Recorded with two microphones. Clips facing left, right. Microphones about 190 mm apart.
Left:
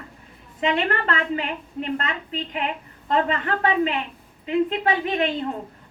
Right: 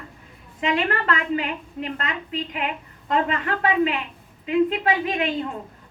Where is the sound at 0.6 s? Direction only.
30° left (ahead or behind).